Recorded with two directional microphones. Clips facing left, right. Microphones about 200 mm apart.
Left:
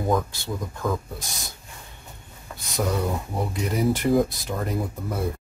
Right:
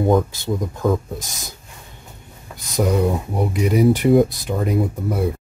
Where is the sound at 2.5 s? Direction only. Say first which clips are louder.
Right 6 dB; 15° right (ahead or behind).